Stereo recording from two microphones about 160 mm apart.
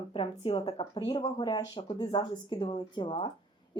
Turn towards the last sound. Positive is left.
turn(degrees=30)  # may be behind; listen again after turning